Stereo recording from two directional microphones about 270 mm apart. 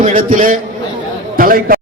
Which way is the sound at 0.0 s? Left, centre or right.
Right.